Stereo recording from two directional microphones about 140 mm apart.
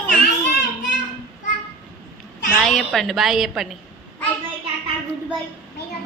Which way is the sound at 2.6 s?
Centre (ahead or behind).